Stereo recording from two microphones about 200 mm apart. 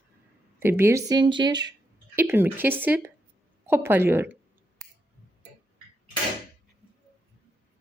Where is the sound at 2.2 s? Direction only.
10° right (ahead or behind).